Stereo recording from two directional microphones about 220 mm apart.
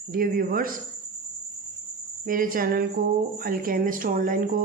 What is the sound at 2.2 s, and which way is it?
A woman's voice, 40° right (ahead or behind).